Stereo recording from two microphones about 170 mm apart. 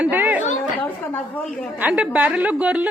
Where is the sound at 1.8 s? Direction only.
5° right (ahead or behind).